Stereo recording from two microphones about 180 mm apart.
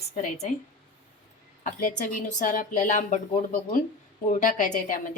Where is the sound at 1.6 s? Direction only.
45° left (ahead or behind).